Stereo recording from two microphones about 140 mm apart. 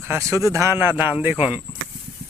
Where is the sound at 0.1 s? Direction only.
20° right (ahead or behind).